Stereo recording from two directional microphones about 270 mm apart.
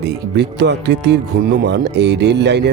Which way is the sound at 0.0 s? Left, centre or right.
Right.